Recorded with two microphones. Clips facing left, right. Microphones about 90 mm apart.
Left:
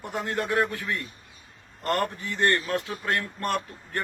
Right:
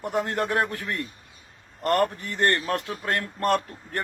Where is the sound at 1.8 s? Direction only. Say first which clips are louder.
Right 4 dB; 40° right (ahead or behind).